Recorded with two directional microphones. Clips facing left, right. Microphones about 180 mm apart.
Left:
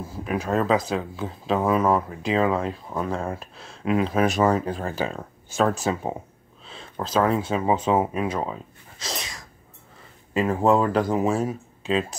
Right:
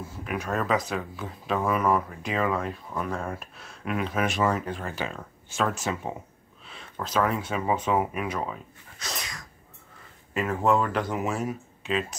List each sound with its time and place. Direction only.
0.0 s speech: 35° left (ahead or behind)
9.0 s sneeze: 25° left (ahead or behind)
10.3 s speech: 30° left (ahead or behind)